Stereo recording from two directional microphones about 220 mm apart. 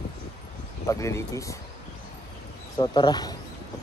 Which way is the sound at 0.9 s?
15° left (ahead or behind).